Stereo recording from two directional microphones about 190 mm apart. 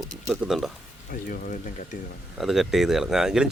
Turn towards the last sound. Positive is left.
turn(degrees=-5)  # may be behind; listen again after turning